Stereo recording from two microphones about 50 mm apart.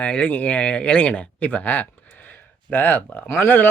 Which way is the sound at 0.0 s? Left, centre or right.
Left.